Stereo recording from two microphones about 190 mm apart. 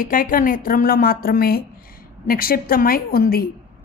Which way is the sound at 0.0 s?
45° left (ahead or behind).